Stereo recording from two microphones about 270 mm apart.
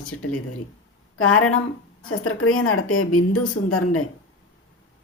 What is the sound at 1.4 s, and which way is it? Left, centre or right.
A woman's voice, left.